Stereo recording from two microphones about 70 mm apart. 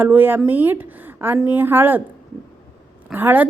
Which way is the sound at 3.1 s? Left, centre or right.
Right.